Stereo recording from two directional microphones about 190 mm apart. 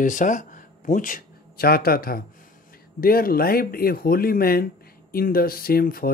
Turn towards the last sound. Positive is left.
turn(degrees=50)  # may be behind; listen again after turning